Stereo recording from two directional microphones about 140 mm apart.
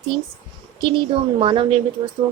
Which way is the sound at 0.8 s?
40° right (ahead or behind).